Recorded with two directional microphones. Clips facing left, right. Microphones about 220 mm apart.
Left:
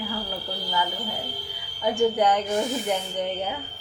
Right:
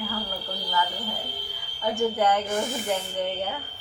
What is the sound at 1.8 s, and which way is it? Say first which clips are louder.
Speech: left 3 dB; 15° left (ahead or behind).